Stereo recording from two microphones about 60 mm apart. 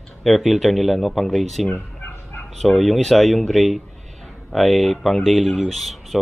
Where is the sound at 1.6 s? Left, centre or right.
Left.